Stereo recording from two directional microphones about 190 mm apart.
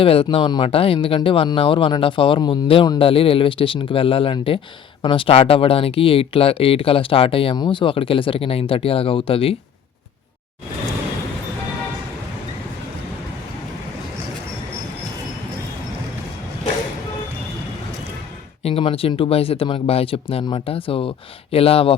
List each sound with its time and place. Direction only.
0.0 s speech: 30° left (ahead or behind)
18.6 s speech: 30° left (ahead or behind)